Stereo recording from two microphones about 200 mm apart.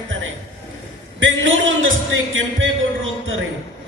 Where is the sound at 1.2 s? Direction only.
75° right (ahead or behind).